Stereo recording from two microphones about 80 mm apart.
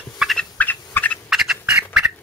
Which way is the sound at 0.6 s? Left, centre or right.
Left.